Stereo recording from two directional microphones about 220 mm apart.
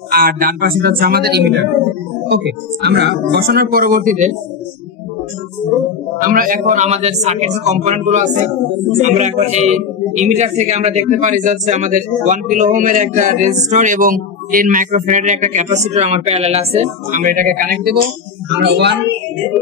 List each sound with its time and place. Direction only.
0.1 s speech: 40° right (ahead or behind)
5.7 s speech: centre (ahead or behind)
6.2 s speech: 40° right (ahead or behind)